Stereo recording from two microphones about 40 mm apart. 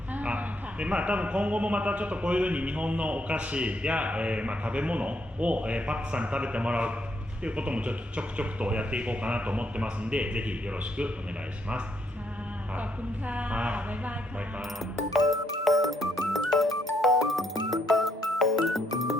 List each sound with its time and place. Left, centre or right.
0.1 s a man's voice: right
13.2 s a man's voice: right
14.8 s music: centre